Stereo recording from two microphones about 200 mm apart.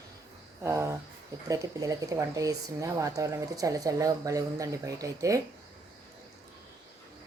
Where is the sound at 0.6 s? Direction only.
15° right (ahead or behind).